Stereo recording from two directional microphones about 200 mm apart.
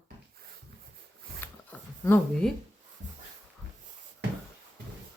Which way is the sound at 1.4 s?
10° left (ahead or behind).